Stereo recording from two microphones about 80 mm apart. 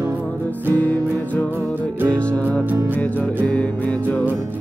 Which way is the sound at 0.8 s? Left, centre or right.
Left.